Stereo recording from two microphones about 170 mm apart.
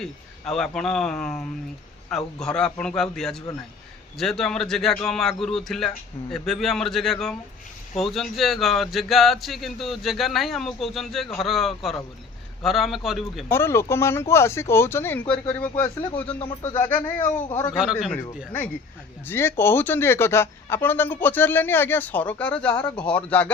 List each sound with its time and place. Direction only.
0.0 s speech: 5° left (ahead or behind)
13.5 s speech: 15° left (ahead or behind)
16.4 s speech: 30° left (ahead or behind)
17.2 s speech: 10° left (ahead or behind)
19.3 s speech: 15° left (ahead or behind)